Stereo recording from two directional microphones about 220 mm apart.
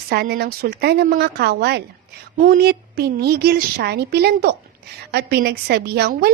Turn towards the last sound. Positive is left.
turn(degrees=-45)  # may be behind; listen again after turning